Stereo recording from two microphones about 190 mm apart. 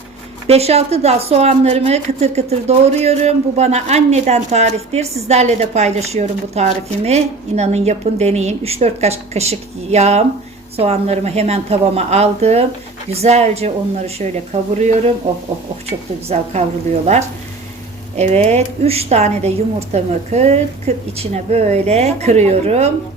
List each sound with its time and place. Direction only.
0.4 s a woman's voice: 35° right (ahead or behind)
16.3 s a woman's voice: 35° right (ahead or behind)